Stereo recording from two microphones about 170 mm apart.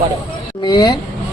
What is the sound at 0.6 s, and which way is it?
Speech, 25° left (ahead or behind).